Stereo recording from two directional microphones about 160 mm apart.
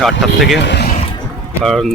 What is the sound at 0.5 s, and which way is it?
Speech, 90° left.